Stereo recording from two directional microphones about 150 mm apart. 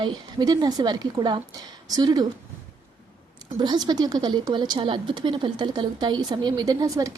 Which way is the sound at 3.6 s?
30° right (ahead or behind).